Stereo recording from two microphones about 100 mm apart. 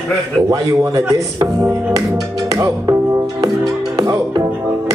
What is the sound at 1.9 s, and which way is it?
Music, 35° right (ahead or behind).